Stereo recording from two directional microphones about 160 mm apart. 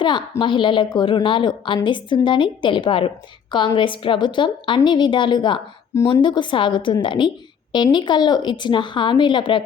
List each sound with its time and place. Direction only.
0.0 s a woman's voice: 30° left (ahead or behind)